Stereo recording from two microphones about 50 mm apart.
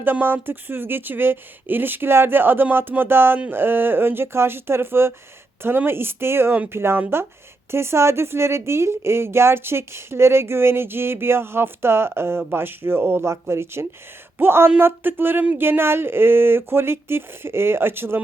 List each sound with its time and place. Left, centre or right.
0.0 s a woman's voice: right
14.3 s speech: right